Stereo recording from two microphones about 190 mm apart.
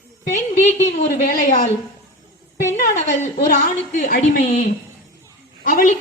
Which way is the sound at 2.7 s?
45° left (ahead or behind).